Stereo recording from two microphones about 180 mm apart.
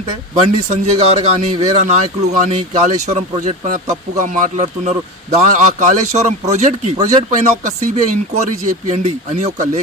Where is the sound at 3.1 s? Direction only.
40° right (ahead or behind).